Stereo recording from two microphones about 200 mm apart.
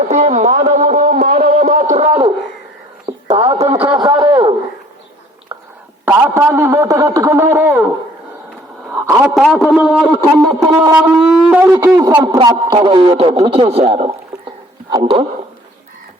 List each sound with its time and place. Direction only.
0.1 s a sound: 35° right (ahead or behind); by 4.5 s 20° right (ahead or behind)
5.5 s whispering: 25° right (ahead or behind)
6.1 s a man's voice: 10° right (ahead or behind)
9.0 s a man's voice: 5° right (ahead or behind); by 15.3 s 25° right (ahead or behind)